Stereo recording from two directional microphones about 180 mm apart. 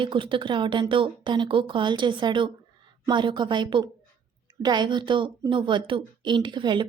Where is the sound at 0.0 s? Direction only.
25° right (ahead or behind).